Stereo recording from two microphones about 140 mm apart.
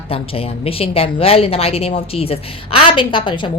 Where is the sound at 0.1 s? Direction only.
45° left (ahead or behind).